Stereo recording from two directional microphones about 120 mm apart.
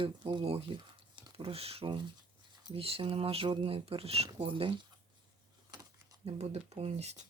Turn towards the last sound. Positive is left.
turn(degrees=-65)  # may be behind; listen again after turning